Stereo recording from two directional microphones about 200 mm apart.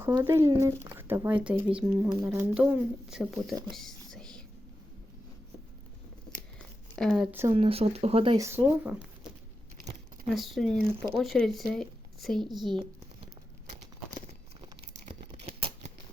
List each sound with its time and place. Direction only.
0.0 s speech: 15° right (ahead or behind)
3.7 s whispering: centre (ahead or behind)
6.9 s speech: centre (ahead or behind)
7.3 s speech: 10° right (ahead or behind)
7.5 s speech: 30° right (ahead or behind)
8.4 s speech: 10° right (ahead or behind)
10.2 s speech: centre (ahead or behind)
12.6 s speech: 25° right (ahead or behind)
14.9 s tearing: 30° right (ahead or behind)